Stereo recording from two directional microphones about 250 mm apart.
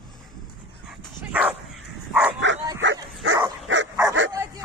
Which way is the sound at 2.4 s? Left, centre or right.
Right.